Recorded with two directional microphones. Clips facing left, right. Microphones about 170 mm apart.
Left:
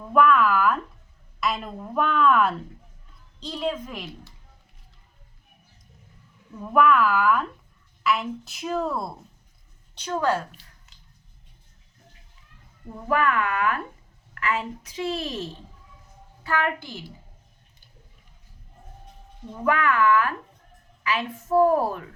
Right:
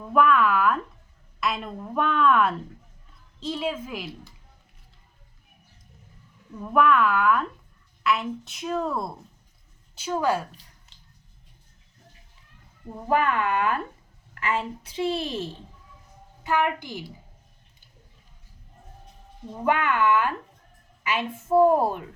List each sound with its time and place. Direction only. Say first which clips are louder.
0.1 s a woman's voice: left 1 dB; centre (ahead or behind)
6.6 s a woman's voice: left 1 dB; centre (ahead or behind)
13.1 s a woman's voice: even; 25° right (ahead or behind)
16.4 s a woman's voice: right 2 dB; 15° right (ahead or behind)
19.6 s a woman's voice: left 1 dB; 25° right (ahead or behind)